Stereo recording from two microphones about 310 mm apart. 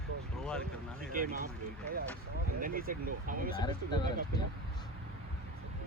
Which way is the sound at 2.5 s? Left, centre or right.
Right.